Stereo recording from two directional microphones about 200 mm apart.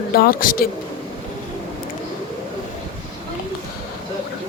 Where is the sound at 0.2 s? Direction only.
45° left (ahead or behind).